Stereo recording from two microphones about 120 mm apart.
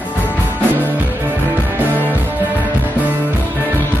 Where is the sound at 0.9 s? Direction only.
15° right (ahead or behind).